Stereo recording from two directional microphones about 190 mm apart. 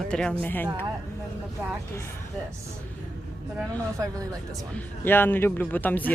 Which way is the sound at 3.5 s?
15° right (ahead or behind).